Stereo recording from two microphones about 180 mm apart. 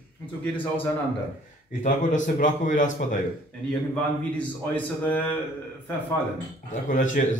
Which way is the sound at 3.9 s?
10° left (ahead or behind).